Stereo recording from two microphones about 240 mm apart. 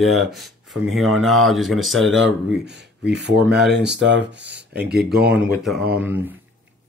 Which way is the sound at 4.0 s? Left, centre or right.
Right.